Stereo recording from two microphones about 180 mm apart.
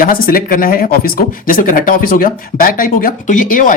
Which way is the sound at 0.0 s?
55° left (ahead or behind).